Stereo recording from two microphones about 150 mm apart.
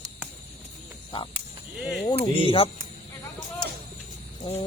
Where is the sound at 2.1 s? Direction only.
35° left (ahead or behind).